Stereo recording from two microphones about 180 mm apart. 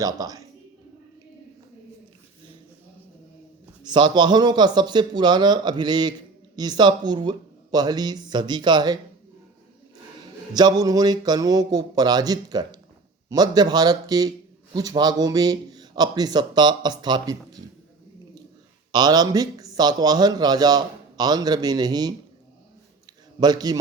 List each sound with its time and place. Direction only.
0.0 s a man's voice: 20° right (ahead or behind)
3.8 s a man's voice: 25° right (ahead or behind)
10.5 s a man's voice: 20° right (ahead or behind)
18.9 s a man's voice: 20° right (ahead or behind)
23.4 s a man's voice: 20° right (ahead or behind)